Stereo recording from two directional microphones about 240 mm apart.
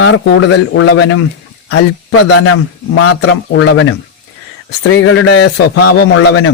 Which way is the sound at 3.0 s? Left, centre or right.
Left.